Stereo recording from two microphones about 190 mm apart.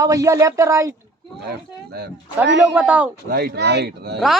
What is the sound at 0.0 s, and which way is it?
Speech, 20° right (ahead or behind).